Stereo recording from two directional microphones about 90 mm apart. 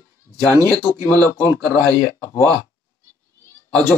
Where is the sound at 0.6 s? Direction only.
25° left (ahead or behind).